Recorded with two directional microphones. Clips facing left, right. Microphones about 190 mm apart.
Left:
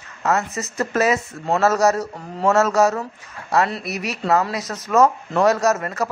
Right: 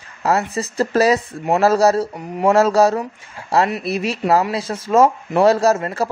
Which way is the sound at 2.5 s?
30° right (ahead or behind).